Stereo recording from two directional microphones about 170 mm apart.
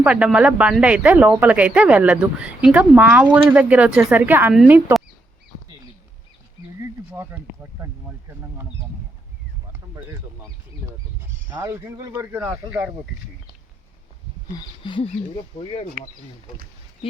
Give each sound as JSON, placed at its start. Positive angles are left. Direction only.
{"t": 0.0, "sound": "speech", "side_deg": -5}
{"t": 7.1, "sound": "speech", "side_deg": -10}
{"t": 11.5, "sound": "speech", "side_deg": -15}
{"t": 14.5, "sound": "a sound", "side_deg": 30}